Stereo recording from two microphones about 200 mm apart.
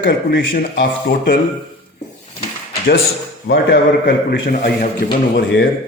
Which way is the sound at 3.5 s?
55° left (ahead or behind).